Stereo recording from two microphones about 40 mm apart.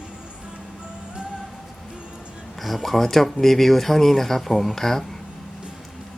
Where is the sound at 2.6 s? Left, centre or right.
Centre.